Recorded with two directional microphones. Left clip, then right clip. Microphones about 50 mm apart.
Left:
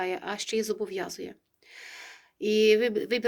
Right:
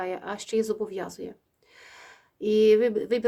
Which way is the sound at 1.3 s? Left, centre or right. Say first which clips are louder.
Right 2 dB; right.